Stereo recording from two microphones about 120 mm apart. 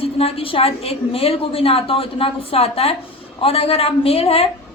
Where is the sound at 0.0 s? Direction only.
55° left (ahead or behind).